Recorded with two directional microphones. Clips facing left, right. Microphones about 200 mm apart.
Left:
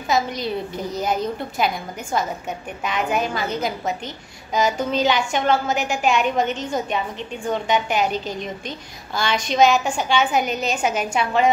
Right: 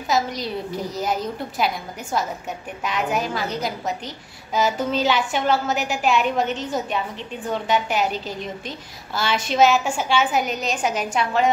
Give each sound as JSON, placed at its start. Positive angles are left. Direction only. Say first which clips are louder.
{"t": 0.1, "sound": "a woman's voice", "louder": "left 1 dB", "side_deg": 0}